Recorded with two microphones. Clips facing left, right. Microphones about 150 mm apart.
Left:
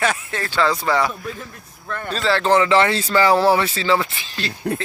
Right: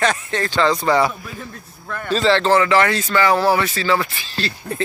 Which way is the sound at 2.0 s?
Centre (ahead or behind).